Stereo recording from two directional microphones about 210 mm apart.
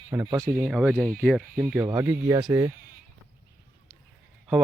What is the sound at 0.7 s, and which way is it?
Speech, centre (ahead or behind).